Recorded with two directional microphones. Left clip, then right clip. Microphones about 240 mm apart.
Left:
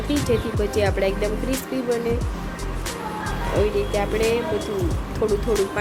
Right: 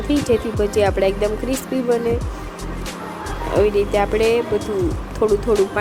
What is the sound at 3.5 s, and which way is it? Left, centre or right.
Speech, right.